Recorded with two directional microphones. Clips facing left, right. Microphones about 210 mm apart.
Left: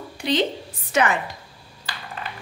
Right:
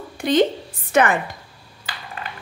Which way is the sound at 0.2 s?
50° right (ahead or behind).